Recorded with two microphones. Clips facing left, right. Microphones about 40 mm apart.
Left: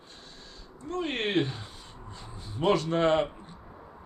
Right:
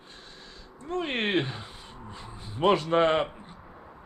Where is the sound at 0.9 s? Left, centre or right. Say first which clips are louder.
Right 1 dB; right.